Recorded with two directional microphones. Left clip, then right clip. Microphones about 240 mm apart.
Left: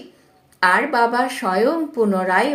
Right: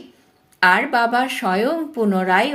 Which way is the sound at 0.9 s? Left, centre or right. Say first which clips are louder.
Even; right.